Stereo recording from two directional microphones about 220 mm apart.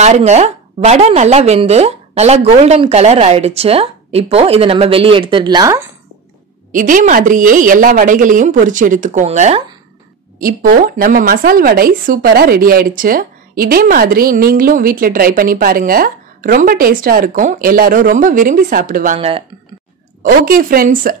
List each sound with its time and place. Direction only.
0.0 s a woman's voice: 30° right (ahead or behind); by 5.9 s 15° right (ahead or behind)
6.7 s speech: 35° right (ahead or behind)
19.1 s a woman's voice: 25° right (ahead or behind)
20.2 s speech: 40° right (ahead or behind)